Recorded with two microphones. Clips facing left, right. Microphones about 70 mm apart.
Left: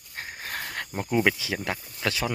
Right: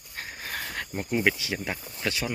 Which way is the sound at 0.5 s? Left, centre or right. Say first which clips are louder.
Even; left.